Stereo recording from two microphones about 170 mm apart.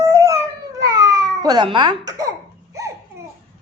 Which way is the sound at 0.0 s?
20° right (ahead or behind).